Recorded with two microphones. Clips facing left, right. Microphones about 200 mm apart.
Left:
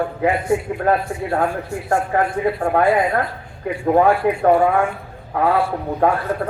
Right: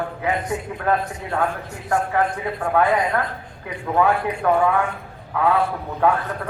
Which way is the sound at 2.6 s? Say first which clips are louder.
Left 1 dB; 40° left (ahead or behind).